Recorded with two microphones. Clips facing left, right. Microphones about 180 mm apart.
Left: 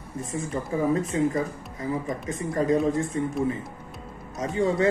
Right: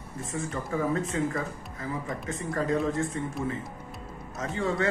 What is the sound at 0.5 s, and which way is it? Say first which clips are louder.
Speech: left 4 dB; 20° left (ahead or behind).